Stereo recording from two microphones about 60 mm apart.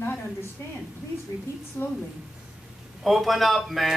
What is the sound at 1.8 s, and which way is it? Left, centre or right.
Speech, left.